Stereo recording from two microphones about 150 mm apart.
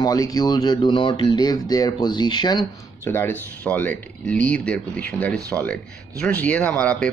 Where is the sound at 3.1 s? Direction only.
15° left (ahead or behind).